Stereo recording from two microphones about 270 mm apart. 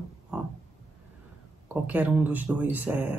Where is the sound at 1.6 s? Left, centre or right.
Centre.